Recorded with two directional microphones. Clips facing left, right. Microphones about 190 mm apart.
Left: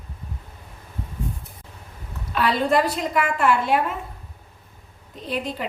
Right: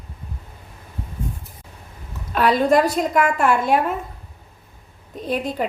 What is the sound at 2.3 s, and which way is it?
A woman's voice, 45° right (ahead or behind).